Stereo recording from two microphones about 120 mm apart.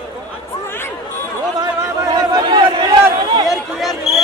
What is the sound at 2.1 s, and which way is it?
Chatter, 35° right (ahead or behind).